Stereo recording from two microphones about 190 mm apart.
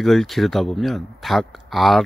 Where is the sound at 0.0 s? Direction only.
Centre (ahead or behind).